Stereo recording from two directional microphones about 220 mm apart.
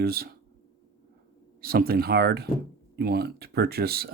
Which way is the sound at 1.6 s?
40° right (ahead or behind).